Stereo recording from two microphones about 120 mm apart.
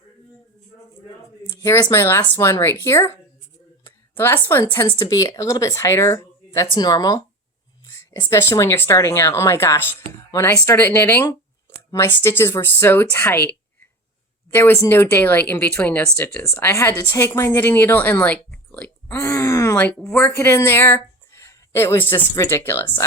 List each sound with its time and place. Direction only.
1.6 s a woman's voice: 20° left (ahead or behind)
14.5 s speech: 20° left (ahead or behind)
19.8 s speech: 10° left (ahead or behind)